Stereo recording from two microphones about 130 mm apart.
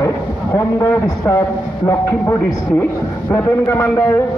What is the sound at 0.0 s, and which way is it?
A man's voice, 25° left (ahead or behind).